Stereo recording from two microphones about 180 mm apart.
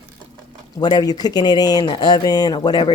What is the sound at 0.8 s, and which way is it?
Speech, 25° left (ahead or behind).